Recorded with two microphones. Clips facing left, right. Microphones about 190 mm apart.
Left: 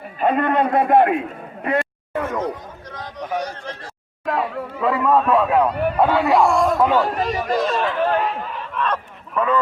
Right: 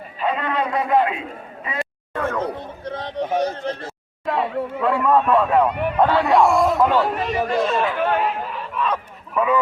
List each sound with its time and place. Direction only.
0.2 s a man's voice: 50° left (ahead or behind)
2.4 s a man's voice: 30° right (ahead or behind)
4.3 s speech: centre (ahead or behind)
7.2 s a man's voice: 40° left (ahead or behind)
7.6 s speech: centre (ahead or behind)
8.7 s honk: 5° right (ahead or behind)